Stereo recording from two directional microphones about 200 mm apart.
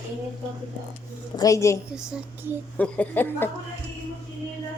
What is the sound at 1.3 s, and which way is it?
Speech, 15° left (ahead or behind).